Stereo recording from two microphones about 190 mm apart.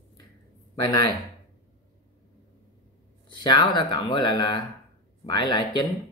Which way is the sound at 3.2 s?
25° left (ahead or behind).